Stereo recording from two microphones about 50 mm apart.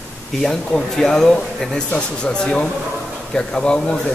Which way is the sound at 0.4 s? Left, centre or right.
Centre.